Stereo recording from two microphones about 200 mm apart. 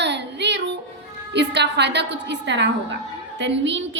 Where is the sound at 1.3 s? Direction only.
60° right (ahead or behind).